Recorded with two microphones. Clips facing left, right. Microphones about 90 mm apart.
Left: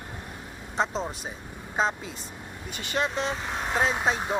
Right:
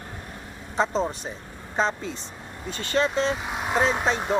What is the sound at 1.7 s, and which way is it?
Speech, 10° left (ahead or behind).